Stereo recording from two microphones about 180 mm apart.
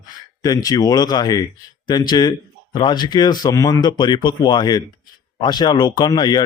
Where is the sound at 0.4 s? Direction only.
20° left (ahead or behind).